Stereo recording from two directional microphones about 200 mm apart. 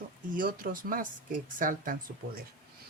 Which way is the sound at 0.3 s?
45° right (ahead or behind).